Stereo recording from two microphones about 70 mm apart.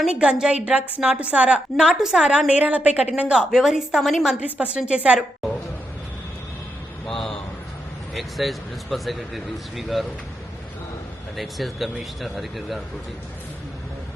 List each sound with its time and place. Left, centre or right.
0.1 s a woman's voice: centre
2.5 s a woman's voice: right
4.4 s a woman's voice: right
7.1 s a sound: centre
8.1 s a man's voice: centre
11.3 s a man's voice: centre